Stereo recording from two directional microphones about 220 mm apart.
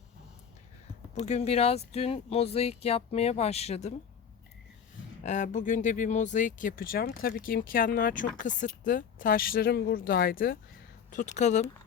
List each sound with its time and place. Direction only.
1.1 s speech: 30° left (ahead or behind)
5.2 s speech: 35° left (ahead or behind)